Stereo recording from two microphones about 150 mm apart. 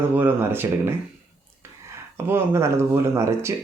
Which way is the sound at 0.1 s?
15° right (ahead or behind).